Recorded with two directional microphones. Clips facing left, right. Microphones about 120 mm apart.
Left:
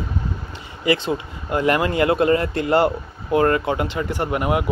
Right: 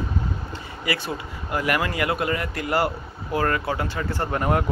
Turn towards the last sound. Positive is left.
turn(degrees=10)  # may be behind; listen again after turning